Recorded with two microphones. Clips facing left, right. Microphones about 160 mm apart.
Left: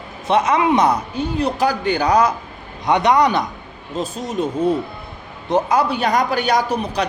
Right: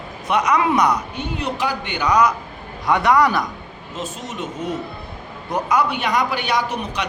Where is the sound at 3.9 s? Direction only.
35° left (ahead or behind).